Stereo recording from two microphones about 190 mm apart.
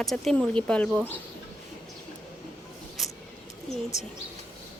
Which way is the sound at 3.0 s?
Centre (ahead or behind).